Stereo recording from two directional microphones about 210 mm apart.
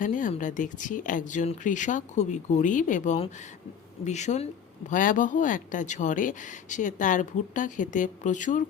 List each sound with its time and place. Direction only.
0.0 s speech: 35° left (ahead or behind)